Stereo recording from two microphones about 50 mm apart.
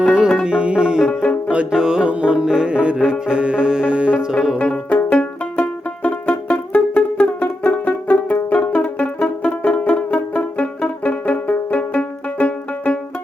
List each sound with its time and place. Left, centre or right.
0.0 s music: centre
4.5 s music: left